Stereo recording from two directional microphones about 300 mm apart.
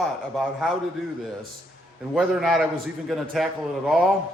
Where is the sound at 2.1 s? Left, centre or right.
Centre.